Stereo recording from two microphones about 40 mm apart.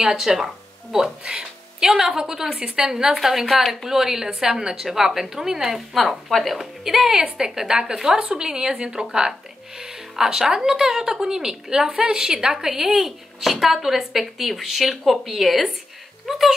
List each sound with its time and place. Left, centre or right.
0.0 s a woman's voice: centre